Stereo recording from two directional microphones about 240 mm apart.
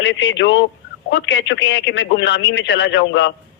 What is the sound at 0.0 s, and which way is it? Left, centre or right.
A man's voice, left.